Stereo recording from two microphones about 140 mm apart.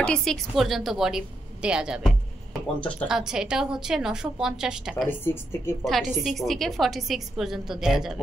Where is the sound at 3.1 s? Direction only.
5° right (ahead or behind).